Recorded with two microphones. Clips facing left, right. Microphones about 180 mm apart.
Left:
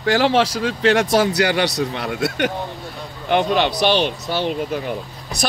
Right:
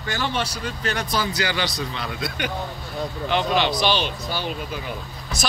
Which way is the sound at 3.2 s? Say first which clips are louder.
Left 5 dB; 55° left (ahead or behind).